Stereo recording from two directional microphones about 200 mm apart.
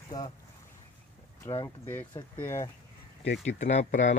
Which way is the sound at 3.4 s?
35° left (ahead or behind).